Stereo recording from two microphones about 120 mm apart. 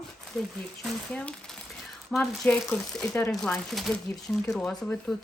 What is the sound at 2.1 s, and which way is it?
Speech, 5° left (ahead or behind).